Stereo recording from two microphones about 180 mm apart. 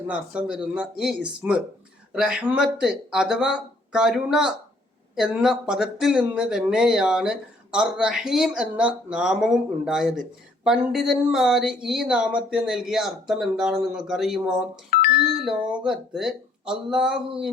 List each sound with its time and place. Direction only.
0.1 s speech: 5° right (ahead or behind)
14.8 s a sound: 50° left (ahead or behind)
15.4 s speech: 5° right (ahead or behind)